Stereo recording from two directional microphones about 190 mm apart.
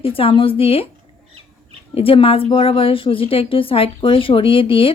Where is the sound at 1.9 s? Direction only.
30° left (ahead or behind).